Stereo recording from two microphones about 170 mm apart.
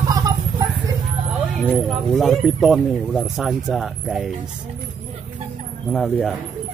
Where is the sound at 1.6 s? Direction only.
Centre (ahead or behind).